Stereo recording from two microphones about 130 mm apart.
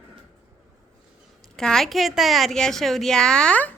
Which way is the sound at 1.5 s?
5° left (ahead or behind).